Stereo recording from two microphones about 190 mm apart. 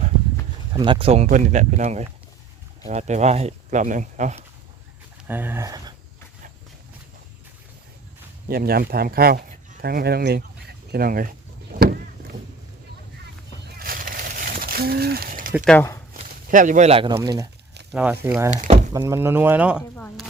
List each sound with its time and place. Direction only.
0.7 s speech: 25° right (ahead or behind)
5.3 s speech: 10° right (ahead or behind)
8.4 s speech: 50° right (ahead or behind)
11.7 s vehicle: 55° right (ahead or behind)
13.7 s a sound: 50° right (ahead or behind)
15.6 s speech: 5° left (ahead or behind)
16.1 s speech: 45° right (ahead or behind)
17.2 s speech: 20° right (ahead or behind)
18.5 s speech: 40° right (ahead or behind)
18.9 s speech: 15° right (ahead or behind)